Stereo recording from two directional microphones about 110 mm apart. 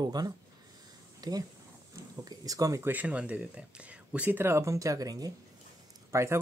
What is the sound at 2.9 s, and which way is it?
Speech, 15° right (ahead or behind).